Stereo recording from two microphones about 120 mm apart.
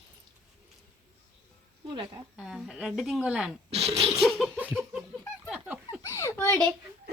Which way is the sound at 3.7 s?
60° right (ahead or behind).